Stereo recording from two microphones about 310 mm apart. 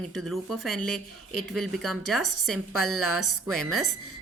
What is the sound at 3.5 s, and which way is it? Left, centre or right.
Speech, centre.